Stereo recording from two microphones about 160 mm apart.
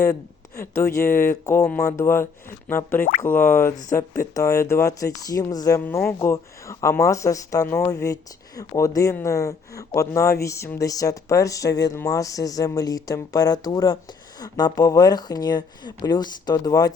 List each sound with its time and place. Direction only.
0.6 s speech: 15° left (ahead or behind)
3.0 s speech: 60° left (ahead or behind)
3.5 s speech: 15° left (ahead or behind)